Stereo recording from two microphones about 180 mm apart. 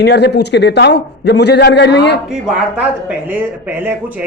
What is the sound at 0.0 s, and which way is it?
A man's voice, 70° left (ahead or behind).